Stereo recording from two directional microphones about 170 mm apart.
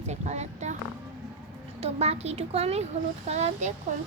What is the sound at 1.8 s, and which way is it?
Speech, 40° right (ahead or behind).